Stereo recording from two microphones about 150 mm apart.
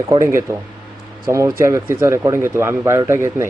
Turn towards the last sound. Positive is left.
turn(degrees=-20)  # may be behind; listen again after turning